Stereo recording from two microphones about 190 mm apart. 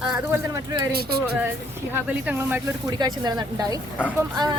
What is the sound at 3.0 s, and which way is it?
Speech, 20° right (ahead or behind).